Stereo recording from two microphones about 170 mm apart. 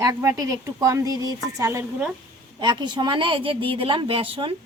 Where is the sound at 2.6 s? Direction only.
25° right (ahead or behind).